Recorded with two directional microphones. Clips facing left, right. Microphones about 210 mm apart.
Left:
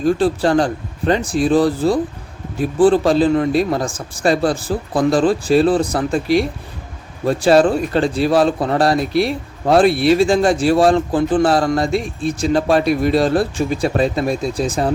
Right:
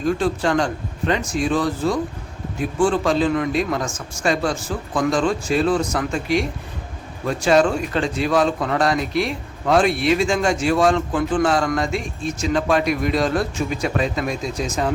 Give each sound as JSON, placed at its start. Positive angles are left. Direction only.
{"t": 0.0, "sound": "a man's voice", "side_deg": 35}